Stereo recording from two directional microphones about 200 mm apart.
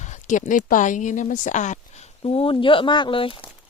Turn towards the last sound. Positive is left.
turn(degrees=25)  # may be behind; listen again after turning